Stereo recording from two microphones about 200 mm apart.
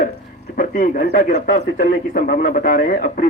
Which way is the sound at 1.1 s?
40° left (ahead or behind).